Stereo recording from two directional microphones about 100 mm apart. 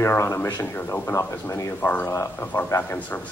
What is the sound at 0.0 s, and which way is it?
A man's voice, 30° left (ahead or behind).